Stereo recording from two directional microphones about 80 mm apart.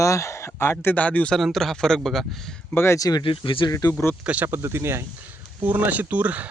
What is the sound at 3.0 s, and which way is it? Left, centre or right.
Speech, left.